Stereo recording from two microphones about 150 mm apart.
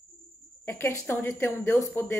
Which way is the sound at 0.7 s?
15° left (ahead or behind).